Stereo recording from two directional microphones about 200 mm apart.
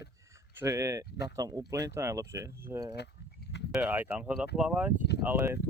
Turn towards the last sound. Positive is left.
turn(degrees=-10)  # may be behind; listen again after turning